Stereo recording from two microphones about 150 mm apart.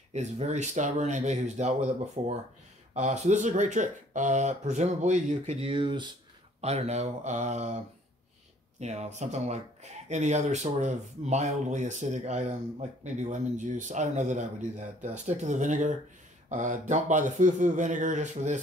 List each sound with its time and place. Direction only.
0.1 s speech: 50° right (ahead or behind); by 6.1 s 30° right (ahead or behind)
6.6 s a man's voice: 45° right (ahead or behind)